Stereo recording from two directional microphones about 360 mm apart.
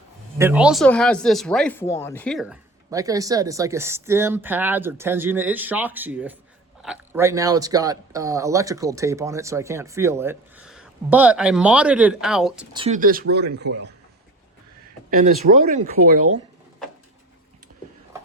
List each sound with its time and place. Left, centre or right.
0.3 s speech: centre
12.7 s speech: centre
15.1 s speech: right